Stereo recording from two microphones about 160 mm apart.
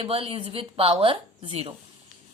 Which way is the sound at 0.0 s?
35° right (ahead or behind).